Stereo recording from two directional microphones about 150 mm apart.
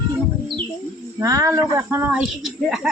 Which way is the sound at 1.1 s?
20° right (ahead or behind).